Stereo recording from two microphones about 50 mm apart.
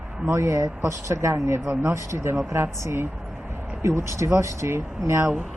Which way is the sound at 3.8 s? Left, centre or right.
Right.